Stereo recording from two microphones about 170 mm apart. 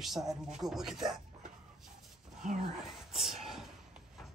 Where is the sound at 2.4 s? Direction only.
50° right (ahead or behind).